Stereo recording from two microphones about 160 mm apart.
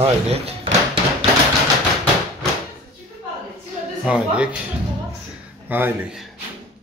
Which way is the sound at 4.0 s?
5° right (ahead or behind).